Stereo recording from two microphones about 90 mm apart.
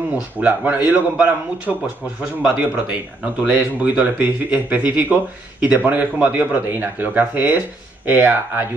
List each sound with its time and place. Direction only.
0.1 s speech: 15° right (ahead or behind)